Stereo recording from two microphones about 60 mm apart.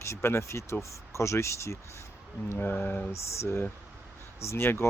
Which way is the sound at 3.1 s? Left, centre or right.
Left.